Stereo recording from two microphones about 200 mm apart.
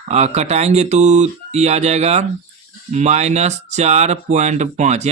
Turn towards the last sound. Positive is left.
turn(degrees=-35)  # may be behind; listen again after turning